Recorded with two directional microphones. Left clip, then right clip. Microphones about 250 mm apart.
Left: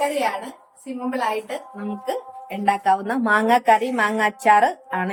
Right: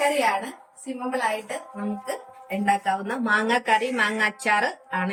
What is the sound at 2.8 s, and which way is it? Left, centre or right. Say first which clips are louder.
A woman's voice: left 6 dB; centre.